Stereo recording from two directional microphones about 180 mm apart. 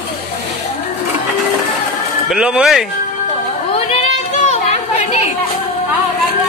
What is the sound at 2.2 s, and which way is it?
Speech, 5° right (ahead or behind).